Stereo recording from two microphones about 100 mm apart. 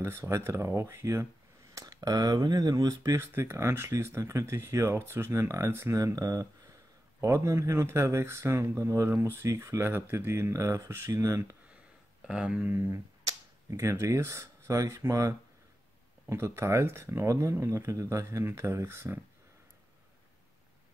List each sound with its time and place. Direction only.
0.0 s speech: 30° right (ahead or behind)
12.2 s speech: 10° right (ahead or behind)